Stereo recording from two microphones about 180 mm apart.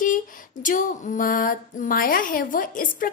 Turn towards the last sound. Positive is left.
turn(degrees=50)  # may be behind; listen again after turning